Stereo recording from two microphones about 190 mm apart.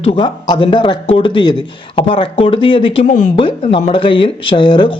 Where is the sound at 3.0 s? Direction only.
45° left (ahead or behind).